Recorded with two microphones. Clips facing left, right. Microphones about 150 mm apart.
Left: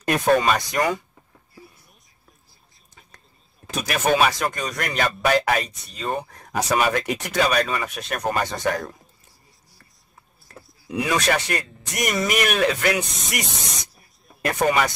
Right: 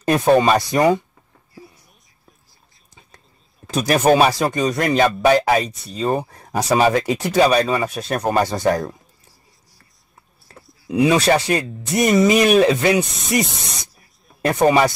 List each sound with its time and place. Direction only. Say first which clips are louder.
0.1 s speech: right 5 dB; 25° right (ahead or behind)
3.7 s speech: right 6 dB; 35° right (ahead or behind)
10.9 s speech: right 7 dB; 30° right (ahead or behind)